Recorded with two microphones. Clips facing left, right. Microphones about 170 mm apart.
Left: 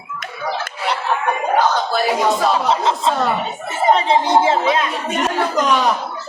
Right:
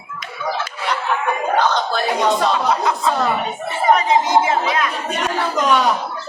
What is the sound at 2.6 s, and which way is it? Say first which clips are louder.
Speech: left 1 dB; 25° left (ahead or behind).